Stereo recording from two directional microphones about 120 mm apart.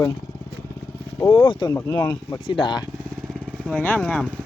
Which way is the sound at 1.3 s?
40° left (ahead or behind).